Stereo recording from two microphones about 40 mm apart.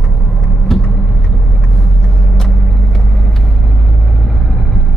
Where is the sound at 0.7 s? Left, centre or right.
Centre.